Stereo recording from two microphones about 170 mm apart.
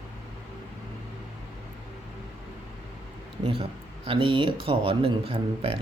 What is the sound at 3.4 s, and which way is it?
Speech, 30° right (ahead or behind).